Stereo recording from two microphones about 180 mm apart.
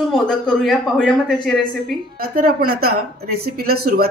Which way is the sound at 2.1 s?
55° right (ahead or behind).